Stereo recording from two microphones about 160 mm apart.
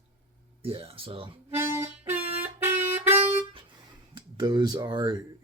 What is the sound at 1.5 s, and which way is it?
Harmonica, 15° right (ahead or behind).